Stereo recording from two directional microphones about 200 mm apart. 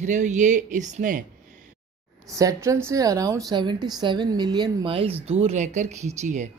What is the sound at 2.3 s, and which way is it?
A woman's voice, 15° right (ahead or behind).